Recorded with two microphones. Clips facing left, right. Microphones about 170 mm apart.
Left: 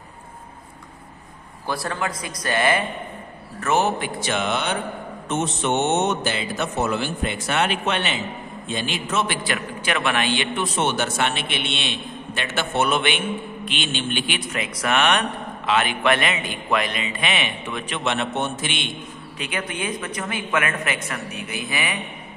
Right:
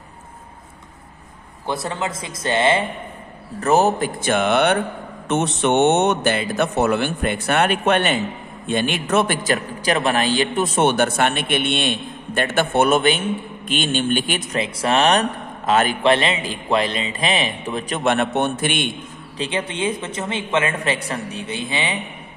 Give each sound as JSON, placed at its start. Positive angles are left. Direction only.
{"t": 1.7, "sound": "a man's voice", "side_deg": -20}
{"t": 3.6, "sound": "a man's voice", "side_deg": -40}
{"t": 19.3, "sound": "a man's voice", "side_deg": -30}